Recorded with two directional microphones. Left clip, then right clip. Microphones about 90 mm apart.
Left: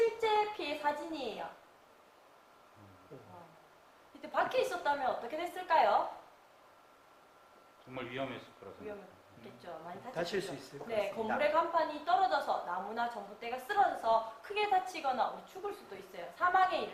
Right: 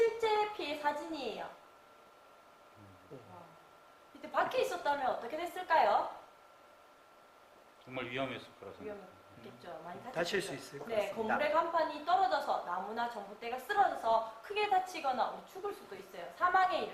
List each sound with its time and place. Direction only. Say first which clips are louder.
0.0 s a sound: even; centre (ahead or behind)
4.2 s a woman's voice: even; centre (ahead or behind)
7.9 s a man's voice: right 2 dB; 45° right (ahead or behind)
9.4 s a woman's voice: left 1 dB; centre (ahead or behind)
10.1 s speech: right 2 dB; 25° right (ahead or behind)
10.8 s a woman's voice: even; centre (ahead or behind)